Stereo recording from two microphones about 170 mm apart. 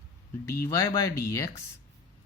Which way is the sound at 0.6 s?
15° left (ahead or behind).